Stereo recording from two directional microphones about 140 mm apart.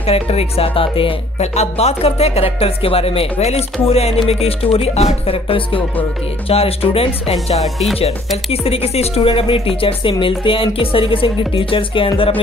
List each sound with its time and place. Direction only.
0.0 s speech: 45° left (ahead or behind)
7.6 s music: centre (ahead or behind)
8.5 s speech: 45° left (ahead or behind)